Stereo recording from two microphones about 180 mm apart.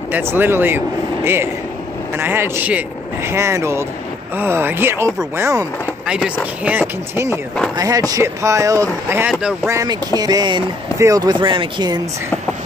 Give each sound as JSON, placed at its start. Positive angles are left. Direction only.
{"t": 0.1, "sound": "speech", "side_deg": -10}
{"t": 9.7, "sound": "speech", "side_deg": -20}